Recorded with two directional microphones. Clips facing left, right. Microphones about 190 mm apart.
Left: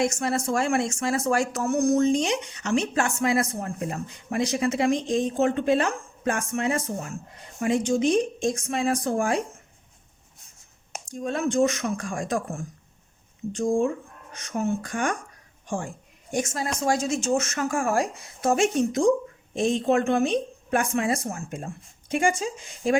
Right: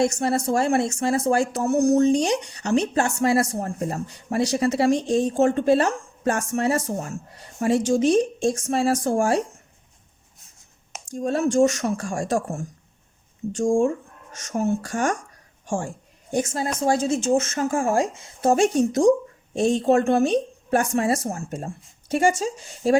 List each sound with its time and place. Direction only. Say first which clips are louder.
0.0 s speech: right 3 dB; 30° right (ahead or behind)
11.1 s speech: right 4 dB; 40° right (ahead or behind)
14.3 s speech: right 3 dB; 45° right (ahead or behind)
16.3 s speech: right 3 dB; 30° right (ahead or behind)
18.5 s speech: right 3 dB; 35° right (ahead or behind)